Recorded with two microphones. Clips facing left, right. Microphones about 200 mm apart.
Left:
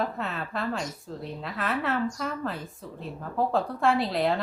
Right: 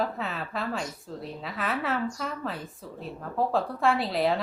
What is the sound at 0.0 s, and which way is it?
A woman's voice, centre (ahead or behind).